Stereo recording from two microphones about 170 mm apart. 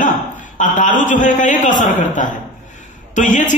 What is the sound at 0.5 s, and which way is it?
A man's voice, 50° left (ahead or behind).